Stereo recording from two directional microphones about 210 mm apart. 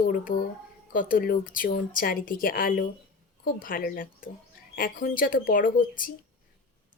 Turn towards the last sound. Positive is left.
turn(degrees=40)  # may be behind; listen again after turning